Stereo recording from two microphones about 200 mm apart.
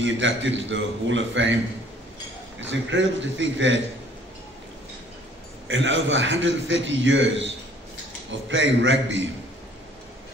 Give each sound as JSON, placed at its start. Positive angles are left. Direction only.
{"t": 0.0, "sound": "a man's voice", "side_deg": -70}
{"t": 2.6, "sound": "a man's voice", "side_deg": -70}
{"t": 5.7, "sound": "a man's voice", "side_deg": -70}
{"t": 8.5, "sound": "a man's voice", "side_deg": -70}